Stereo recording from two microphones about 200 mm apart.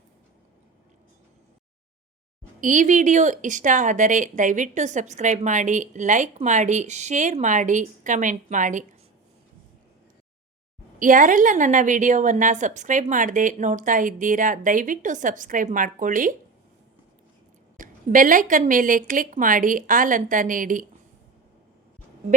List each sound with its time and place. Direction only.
2.6 s speech: 40° right (ahead or behind)
11.0 s speech: 40° right (ahead or behind)
17.7 s a woman's voice: 40° right (ahead or behind)